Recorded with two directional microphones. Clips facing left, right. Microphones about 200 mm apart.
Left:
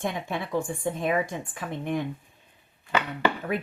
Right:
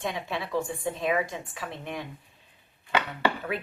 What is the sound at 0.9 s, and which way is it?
A woman's voice, 50° left (ahead or behind).